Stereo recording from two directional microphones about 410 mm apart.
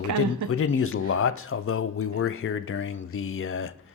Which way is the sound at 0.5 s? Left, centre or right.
Left.